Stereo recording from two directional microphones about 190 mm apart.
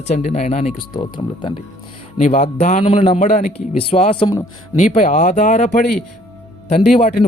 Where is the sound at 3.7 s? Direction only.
30° left (ahead or behind).